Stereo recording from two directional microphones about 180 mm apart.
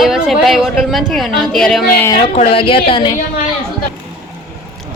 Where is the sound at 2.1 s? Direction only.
30° left (ahead or behind).